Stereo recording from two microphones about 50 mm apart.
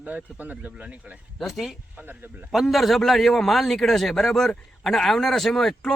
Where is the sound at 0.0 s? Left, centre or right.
Right.